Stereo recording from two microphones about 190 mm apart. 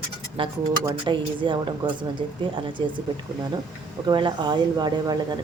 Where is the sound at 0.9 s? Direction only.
25° right (ahead or behind).